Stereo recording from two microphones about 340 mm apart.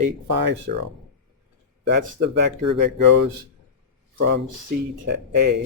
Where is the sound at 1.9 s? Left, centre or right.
Right.